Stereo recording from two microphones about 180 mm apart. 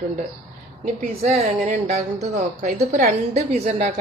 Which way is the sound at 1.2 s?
40° right (ahead or behind).